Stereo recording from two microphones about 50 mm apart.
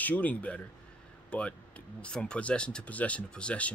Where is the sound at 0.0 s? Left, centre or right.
Left.